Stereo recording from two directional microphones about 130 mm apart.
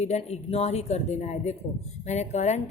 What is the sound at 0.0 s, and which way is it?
A woman's voice, 55° left (ahead or behind).